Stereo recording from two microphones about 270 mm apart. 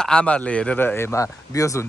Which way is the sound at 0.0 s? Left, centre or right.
Centre.